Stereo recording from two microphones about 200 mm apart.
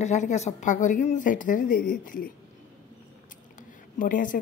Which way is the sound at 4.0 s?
40° left (ahead or behind).